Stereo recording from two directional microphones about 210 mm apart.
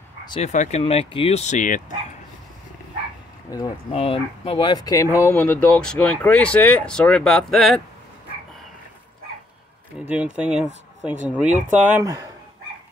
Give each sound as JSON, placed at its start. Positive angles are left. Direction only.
{"t": 0.4, "sound": "speech", "side_deg": 35}
{"t": 3.4, "sound": "speech", "side_deg": 15}
{"t": 3.9, "sound": "speech", "side_deg": 25}
{"t": 9.9, "sound": "speech", "side_deg": -5}
{"t": 11.4, "sound": "speech", "side_deg": -35}
{"t": 11.9, "sound": "speech", "side_deg": -15}